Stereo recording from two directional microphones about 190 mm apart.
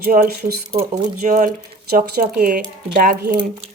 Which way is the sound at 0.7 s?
35° right (ahead or behind).